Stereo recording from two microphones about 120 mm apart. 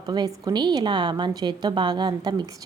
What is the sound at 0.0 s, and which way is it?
A woman's voice, 35° right (ahead or behind).